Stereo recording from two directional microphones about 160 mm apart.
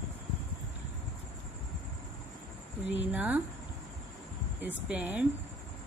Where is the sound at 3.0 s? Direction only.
10° right (ahead or behind).